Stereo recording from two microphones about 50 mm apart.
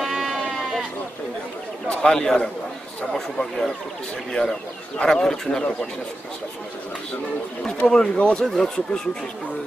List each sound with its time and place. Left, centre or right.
0.0 s sheep: centre
2.0 s speech: centre
7.8 s speech: centre
8.5 s speech: centre